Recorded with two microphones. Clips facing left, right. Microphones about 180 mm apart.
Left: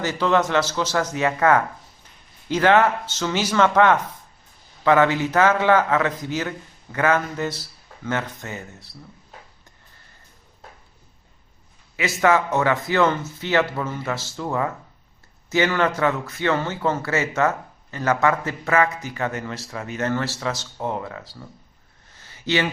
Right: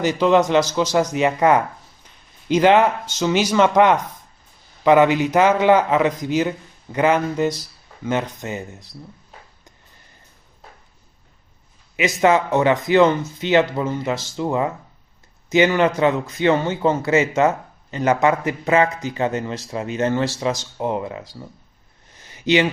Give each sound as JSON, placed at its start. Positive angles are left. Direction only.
{"t": 0.0, "sound": "a man's voice", "side_deg": -15}
{"t": 11.9, "sound": "a man's voice", "side_deg": -20}
{"t": 22.1, "sound": "a sound", "side_deg": -15}